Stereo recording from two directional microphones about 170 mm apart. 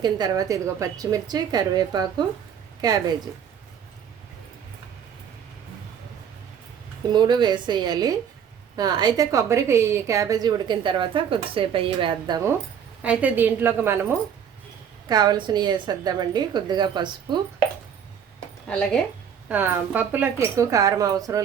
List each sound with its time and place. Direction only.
0.0 s a woman's voice: 25° right (ahead or behind)
7.1 s a woman's voice: 25° right (ahead or behind)
13.0 s a woman's voice: 10° right (ahead or behind); by 17.4 s 25° right (ahead or behind)
19.5 s speech: 10° right (ahead or behind)